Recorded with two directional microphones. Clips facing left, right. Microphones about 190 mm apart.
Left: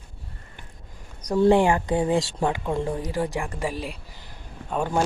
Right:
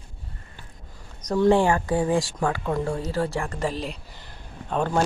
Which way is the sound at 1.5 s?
15° left (ahead or behind).